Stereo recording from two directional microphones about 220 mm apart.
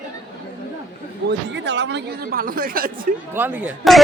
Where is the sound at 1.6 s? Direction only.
50° right (ahead or behind).